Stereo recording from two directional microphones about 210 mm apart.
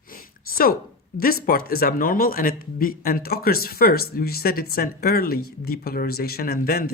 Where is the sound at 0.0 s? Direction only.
45° left (ahead or behind).